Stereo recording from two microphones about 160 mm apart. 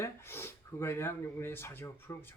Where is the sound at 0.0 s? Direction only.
15° left (ahead or behind).